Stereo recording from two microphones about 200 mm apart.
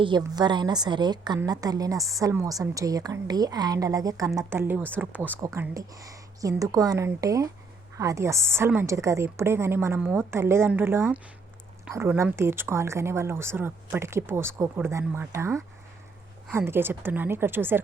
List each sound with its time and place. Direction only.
0.0 s a woman's voice: 20° right (ahead or behind)